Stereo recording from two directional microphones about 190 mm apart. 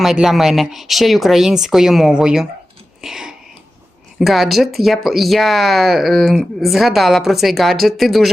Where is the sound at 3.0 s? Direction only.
5° right (ahead or behind).